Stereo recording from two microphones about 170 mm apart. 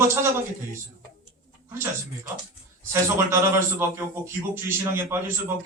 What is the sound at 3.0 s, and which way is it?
A man's voice, 15° right (ahead or behind).